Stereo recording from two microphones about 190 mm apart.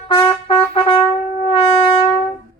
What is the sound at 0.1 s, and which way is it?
Trumpet, 25° left (ahead or behind).